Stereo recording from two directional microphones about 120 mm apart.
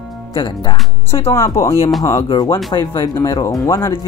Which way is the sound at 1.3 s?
25° left (ahead or behind).